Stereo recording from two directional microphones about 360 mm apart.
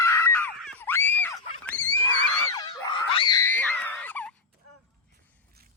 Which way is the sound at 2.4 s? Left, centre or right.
Centre.